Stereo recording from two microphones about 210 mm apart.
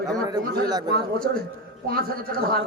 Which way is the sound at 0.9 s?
45° right (ahead or behind).